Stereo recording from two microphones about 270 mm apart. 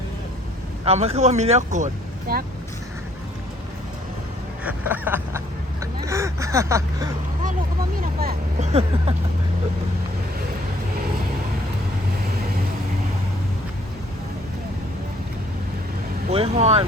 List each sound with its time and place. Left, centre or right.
0.9 s speech: right
4.6 s a sound: centre
5.8 s vehicle: centre
7.9 s vehicle: right
16.3 s speech: right